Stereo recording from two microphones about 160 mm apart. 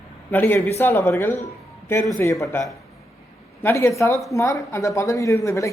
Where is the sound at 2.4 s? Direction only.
20° left (ahead or behind).